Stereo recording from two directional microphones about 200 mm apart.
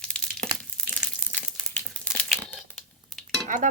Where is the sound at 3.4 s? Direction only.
40° right (ahead or behind).